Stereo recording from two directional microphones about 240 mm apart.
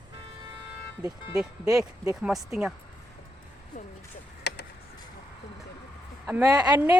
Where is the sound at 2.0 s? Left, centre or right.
Centre.